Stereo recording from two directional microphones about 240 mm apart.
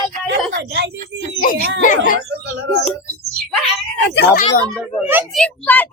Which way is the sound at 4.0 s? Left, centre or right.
Left.